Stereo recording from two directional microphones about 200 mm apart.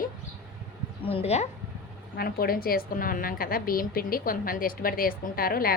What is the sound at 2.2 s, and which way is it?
A woman's voice, 50° left (ahead or behind).